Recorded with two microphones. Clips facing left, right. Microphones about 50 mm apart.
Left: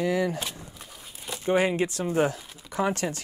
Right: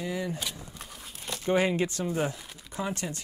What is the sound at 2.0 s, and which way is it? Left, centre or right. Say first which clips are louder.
Speech: left 5 dB; left.